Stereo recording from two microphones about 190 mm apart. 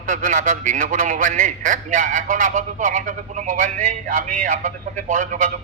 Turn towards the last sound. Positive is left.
turn(degrees=-40)  # may be behind; listen again after turning